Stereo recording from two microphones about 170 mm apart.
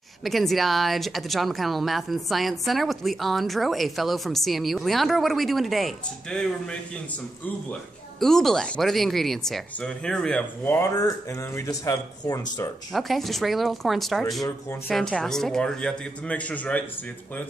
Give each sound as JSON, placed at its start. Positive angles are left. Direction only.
{"t": 0.2, "sound": "speech", "side_deg": 0}
{"t": 8.2, "sound": "speech", "side_deg": 0}
{"t": 12.9, "sound": "speech", "side_deg": 0}